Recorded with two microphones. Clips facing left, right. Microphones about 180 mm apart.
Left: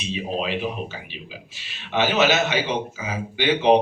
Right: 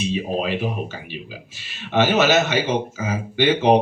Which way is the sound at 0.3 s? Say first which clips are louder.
Even; 45° right (ahead or behind).